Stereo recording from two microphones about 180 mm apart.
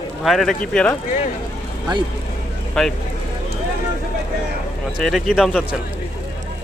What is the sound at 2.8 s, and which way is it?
Speech, centre (ahead or behind).